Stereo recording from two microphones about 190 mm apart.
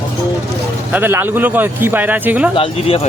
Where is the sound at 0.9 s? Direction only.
10° right (ahead or behind).